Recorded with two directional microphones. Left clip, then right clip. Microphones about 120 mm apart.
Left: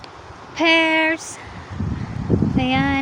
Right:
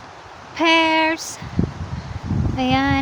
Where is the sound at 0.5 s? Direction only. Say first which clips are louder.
Even; 20° right (ahead or behind).